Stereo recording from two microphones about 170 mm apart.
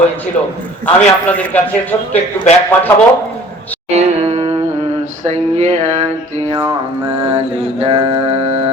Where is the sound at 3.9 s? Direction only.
40° right (ahead or behind).